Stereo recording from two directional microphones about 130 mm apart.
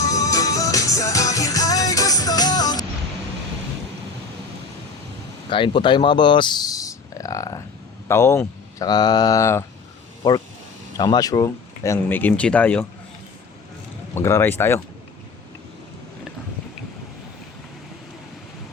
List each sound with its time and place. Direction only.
0.0 s music: 25° left (ahead or behind)
5.5 s speech: 40° left (ahead or behind); by 9.6 s 20° left (ahead or behind)
10.9 s speech: 30° left (ahead or behind); by 12.8 s 10° left (ahead or behind)
14.2 s speech: 20° left (ahead or behind)